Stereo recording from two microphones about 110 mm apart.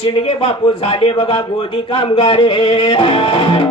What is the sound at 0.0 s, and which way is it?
A man's voice, 60° left (ahead or behind).